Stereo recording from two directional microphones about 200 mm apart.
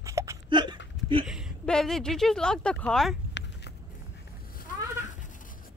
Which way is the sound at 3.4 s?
60° left (ahead or behind).